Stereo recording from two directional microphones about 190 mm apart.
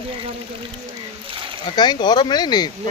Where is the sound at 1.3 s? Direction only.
25° right (ahead or behind).